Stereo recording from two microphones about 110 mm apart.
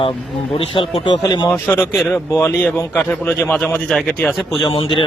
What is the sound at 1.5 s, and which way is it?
Speech, 20° left (ahead or behind).